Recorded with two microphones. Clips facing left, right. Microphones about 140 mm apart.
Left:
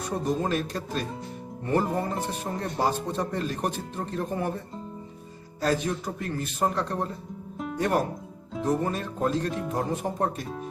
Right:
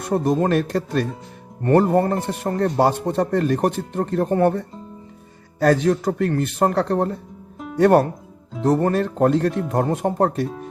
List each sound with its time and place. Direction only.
0.0 s speech: 60° right (ahead or behind)
5.6 s speech: 70° right (ahead or behind)